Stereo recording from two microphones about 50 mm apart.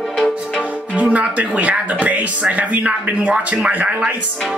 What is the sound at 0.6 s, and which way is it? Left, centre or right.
Speech, right.